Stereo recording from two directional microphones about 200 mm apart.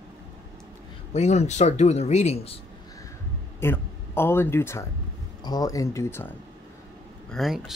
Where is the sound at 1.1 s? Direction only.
35° left (ahead or behind).